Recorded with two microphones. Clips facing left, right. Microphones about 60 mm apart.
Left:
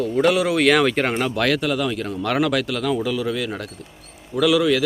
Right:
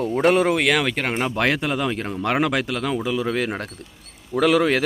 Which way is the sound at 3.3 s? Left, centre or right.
Right.